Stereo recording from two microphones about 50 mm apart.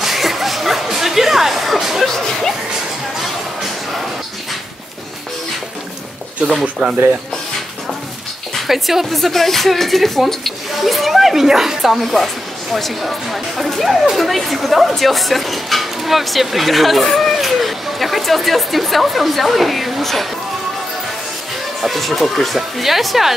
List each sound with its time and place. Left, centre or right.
0.0 s music: centre
6.6 s speech: centre
8.6 s speech: centre
21.8 s speech: centre